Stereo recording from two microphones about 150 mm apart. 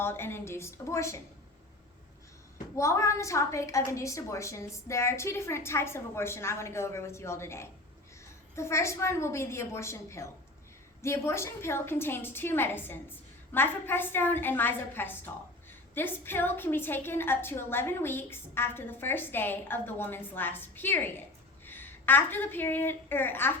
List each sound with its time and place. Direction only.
0.0 s a woman's voice: 15° left (ahead or behind)
2.7 s a woman's voice: 20° left (ahead or behind)